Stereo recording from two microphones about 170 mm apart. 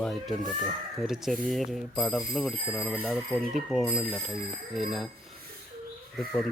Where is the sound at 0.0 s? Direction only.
Centre (ahead or behind).